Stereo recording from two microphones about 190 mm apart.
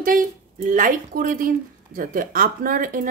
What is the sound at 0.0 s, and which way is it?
A woman's voice, 45° right (ahead or behind).